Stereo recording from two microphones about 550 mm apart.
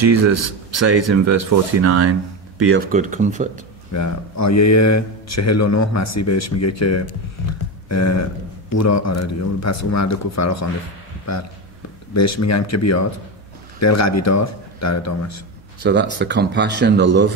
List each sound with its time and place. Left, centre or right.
0.0 s speech: right
3.9 s speech: left
15.8 s speech: centre